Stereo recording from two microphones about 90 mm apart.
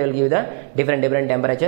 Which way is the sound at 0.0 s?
10° right (ahead or behind).